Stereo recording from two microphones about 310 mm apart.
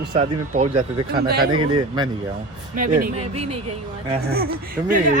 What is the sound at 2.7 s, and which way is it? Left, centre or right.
Speech, right.